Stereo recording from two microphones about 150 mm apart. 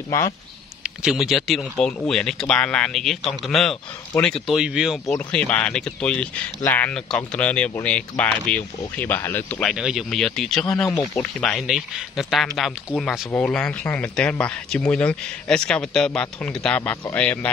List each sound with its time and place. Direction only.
0.8 s speech: 5° right (ahead or behind)
5.1 s speech: 5° left (ahead or behind)
9.8 s speech: 5° right (ahead or behind)
10.9 s speech: 15° left (ahead or behind)
11.4 s speech: centre (ahead or behind)